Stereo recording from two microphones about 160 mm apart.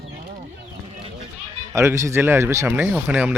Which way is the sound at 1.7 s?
15° right (ahead or behind).